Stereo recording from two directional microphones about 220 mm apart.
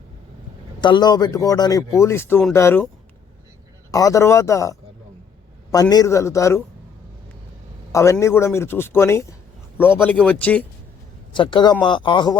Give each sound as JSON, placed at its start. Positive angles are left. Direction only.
{"t": 0.8, "sound": "speech", "side_deg": 20}
{"t": 3.9, "sound": "speech", "side_deg": 15}
{"t": 7.9, "sound": "speech", "side_deg": 15}
{"t": 11.3, "sound": "speech", "side_deg": 20}